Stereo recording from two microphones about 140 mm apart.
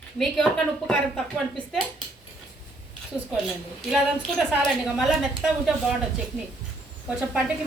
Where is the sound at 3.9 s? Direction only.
Centre (ahead or behind).